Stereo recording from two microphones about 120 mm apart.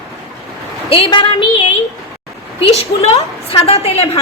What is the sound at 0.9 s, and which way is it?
Speech, 45° left (ahead or behind).